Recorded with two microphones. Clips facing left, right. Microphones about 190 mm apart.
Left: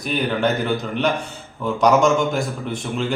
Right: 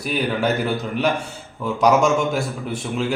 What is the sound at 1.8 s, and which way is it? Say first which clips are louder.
A man's voice: left 1 dB; 5° right (ahead or behind).